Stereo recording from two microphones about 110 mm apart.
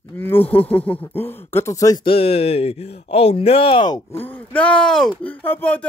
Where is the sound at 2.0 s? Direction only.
60° left (ahead or behind).